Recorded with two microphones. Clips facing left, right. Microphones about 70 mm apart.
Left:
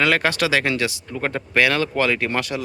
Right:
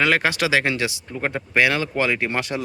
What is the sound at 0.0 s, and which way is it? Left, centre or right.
Speech, centre.